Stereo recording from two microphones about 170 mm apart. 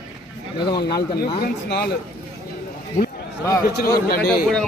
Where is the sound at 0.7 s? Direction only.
70° left (ahead or behind).